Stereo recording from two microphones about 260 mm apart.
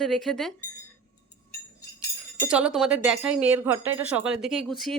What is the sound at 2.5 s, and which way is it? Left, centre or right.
Speech, centre.